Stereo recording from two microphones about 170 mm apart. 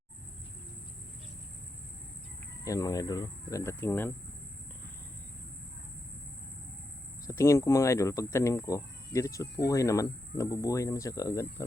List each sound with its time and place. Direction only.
2.6 s speech: 20° left (ahead or behind)
7.3 s speech: 15° left (ahead or behind)